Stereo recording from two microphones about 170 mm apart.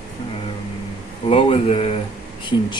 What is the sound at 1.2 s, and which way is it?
Speech, 35° left (ahead or behind).